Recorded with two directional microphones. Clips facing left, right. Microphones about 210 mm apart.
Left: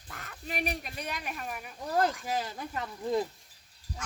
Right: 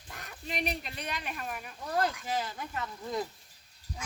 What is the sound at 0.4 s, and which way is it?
Speech, 5° left (ahead or behind).